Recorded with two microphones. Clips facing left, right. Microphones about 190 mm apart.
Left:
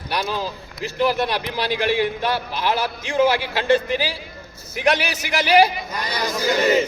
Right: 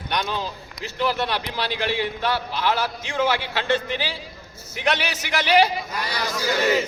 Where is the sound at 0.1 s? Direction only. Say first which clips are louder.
Left 2 dB; 5° left (ahead or behind).